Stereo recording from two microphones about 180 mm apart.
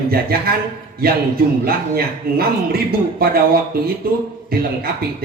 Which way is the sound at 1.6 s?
55° right (ahead or behind).